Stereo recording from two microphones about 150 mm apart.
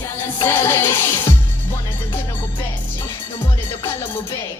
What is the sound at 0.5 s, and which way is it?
Music, 15° left (ahead or behind).